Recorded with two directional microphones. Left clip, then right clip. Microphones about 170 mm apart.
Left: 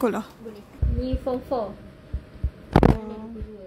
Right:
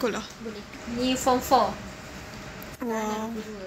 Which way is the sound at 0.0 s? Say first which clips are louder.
Left 3 dB; 65° left (ahead or behind).